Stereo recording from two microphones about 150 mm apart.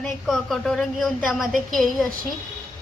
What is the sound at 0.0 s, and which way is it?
A woman's voice, centre (ahead or behind).